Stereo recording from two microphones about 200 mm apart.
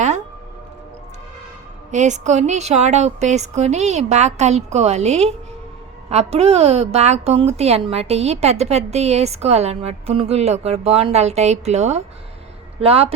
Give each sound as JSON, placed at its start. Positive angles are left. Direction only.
{"t": 1.9, "sound": "a woman's voice", "side_deg": -35}